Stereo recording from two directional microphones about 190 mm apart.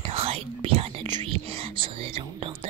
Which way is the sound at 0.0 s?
30° right (ahead or behind).